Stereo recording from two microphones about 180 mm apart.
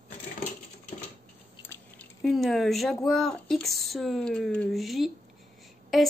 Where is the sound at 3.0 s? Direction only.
Centre (ahead or behind).